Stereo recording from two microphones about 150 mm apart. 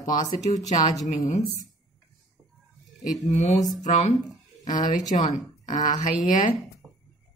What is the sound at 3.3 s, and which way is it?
Speech, 50° left (ahead or behind).